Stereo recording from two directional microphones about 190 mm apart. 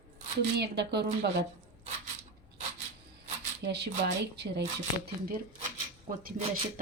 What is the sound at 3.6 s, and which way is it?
Speech, 60° right (ahead or behind).